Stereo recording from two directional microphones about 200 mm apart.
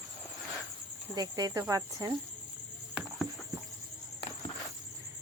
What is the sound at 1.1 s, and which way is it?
Speech, 20° right (ahead or behind).